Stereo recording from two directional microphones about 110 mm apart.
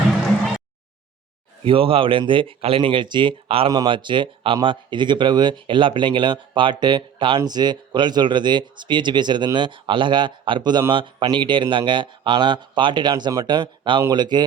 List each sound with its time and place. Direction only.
1.6 s speech: 55° right (ahead or behind)